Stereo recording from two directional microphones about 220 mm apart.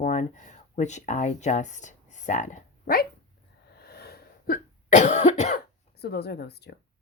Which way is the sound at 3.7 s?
45° left (ahead or behind).